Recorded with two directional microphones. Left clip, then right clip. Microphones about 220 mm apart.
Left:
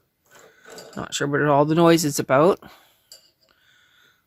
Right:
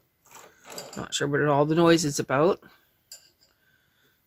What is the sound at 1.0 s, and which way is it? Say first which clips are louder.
Speech: left 3 dB; 25° left (ahead or behind).